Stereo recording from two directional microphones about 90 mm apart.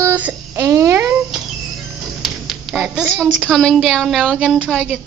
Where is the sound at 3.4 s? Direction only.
5° left (ahead or behind).